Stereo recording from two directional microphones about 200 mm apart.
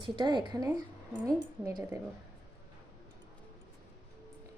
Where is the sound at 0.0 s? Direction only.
20° right (ahead or behind).